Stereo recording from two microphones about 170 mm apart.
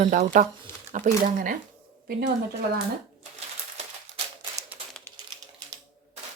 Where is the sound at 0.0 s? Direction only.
45° right (ahead or behind).